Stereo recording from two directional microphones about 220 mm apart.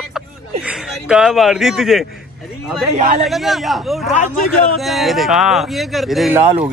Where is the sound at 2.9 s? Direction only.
35° right (ahead or behind).